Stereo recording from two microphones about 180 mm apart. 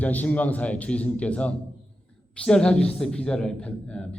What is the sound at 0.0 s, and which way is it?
A man's voice, 10° left (ahead or behind).